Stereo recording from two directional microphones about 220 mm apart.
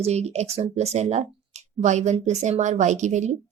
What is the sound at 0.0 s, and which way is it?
A woman's voice, 30° right (ahead or behind).